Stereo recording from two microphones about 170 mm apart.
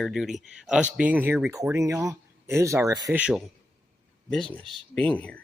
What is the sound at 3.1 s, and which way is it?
Speech, 5° right (ahead or behind).